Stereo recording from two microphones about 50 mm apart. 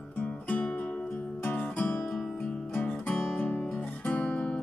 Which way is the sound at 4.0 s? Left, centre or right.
Left.